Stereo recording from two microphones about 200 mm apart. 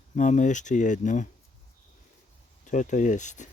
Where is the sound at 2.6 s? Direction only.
40° left (ahead or behind).